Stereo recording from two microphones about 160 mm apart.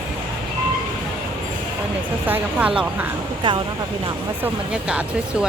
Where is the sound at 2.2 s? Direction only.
10° right (ahead or behind).